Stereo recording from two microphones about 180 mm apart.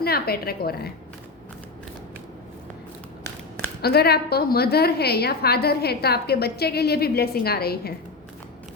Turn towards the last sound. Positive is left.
turn(degrees=60)  # may be behind; listen again after turning